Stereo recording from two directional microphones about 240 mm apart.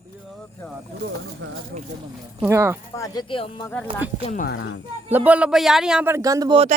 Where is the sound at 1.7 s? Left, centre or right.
Right.